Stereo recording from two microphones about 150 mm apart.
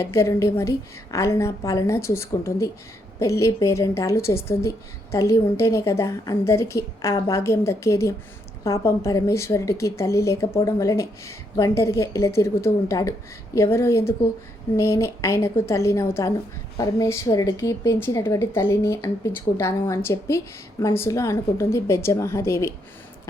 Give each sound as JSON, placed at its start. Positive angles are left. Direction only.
{"t": 0.0, "sound": "a woman's voice", "side_deg": 20}